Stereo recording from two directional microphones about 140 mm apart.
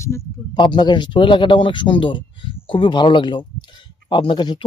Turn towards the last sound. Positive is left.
turn(degrees=35)  # may be behind; listen again after turning